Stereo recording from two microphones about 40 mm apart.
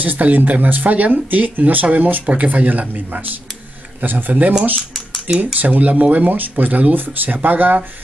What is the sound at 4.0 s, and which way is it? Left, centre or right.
Speech, right.